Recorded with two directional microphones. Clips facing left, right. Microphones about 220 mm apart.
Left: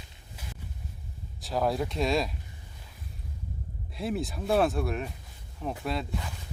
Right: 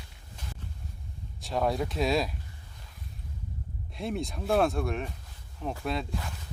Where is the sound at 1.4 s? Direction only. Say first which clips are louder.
Even; centre (ahead or behind).